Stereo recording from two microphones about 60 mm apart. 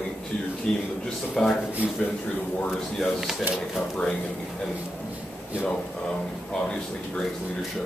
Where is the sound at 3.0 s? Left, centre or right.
Centre.